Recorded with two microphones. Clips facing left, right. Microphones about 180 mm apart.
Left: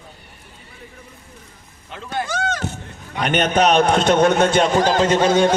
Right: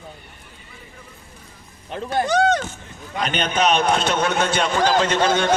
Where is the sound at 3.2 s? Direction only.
55° left (ahead or behind).